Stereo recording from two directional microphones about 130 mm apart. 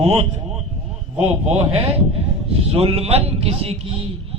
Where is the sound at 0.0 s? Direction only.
50° right (ahead or behind).